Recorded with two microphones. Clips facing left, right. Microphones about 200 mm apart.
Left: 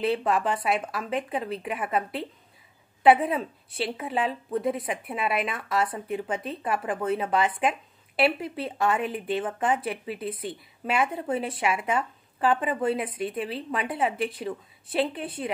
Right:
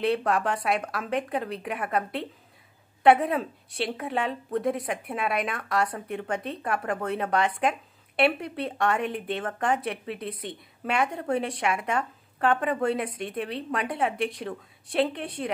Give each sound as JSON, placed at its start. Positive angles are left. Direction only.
{"t": 0.0, "sound": "a woman's voice", "side_deg": 0}